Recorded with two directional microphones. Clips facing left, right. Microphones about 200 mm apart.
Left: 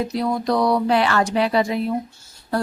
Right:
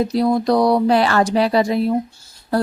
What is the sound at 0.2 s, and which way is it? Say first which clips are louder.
Speech: right 5 dB; 35° right (ahead or behind).